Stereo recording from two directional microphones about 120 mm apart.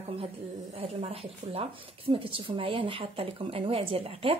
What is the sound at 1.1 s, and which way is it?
Speech, 55° right (ahead or behind).